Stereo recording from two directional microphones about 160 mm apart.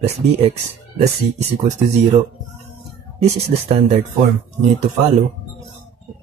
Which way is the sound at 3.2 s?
40° right (ahead or behind).